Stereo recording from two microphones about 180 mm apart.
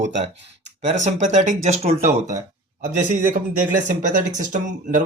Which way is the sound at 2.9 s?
45° right (ahead or behind).